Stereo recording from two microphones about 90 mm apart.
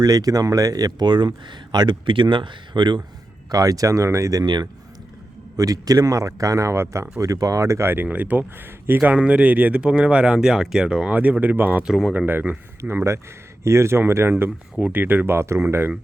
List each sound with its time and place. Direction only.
0.0 s speech: 45° right (ahead or behind); by 3.0 s 60° right (ahead or behind)
3.5 s a man's voice: 40° right (ahead or behind)
5.5 s a man's voice: 40° right (ahead or behind); by 11.9 s 20° right (ahead or behind)
11.9 s speech: 5° right (ahead or behind)
12.1 s speech: 20° right (ahead or behind)